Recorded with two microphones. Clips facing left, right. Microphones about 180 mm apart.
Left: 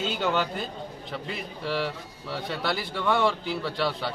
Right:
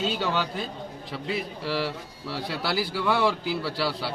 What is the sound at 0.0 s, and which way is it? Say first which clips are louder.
A man's voice: even; centre (ahead or behind).